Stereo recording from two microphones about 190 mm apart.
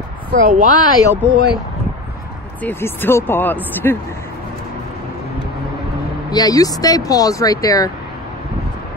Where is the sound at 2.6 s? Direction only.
10° left (ahead or behind).